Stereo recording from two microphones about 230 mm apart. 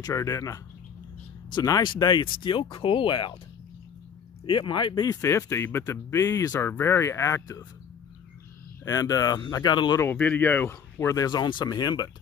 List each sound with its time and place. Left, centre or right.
0.0 s speech: centre
4.5 s speech: centre
8.8 s speech: centre